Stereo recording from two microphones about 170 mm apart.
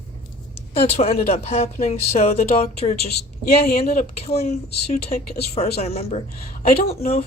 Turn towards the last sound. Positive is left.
turn(degrees=35)  # may be behind; listen again after turning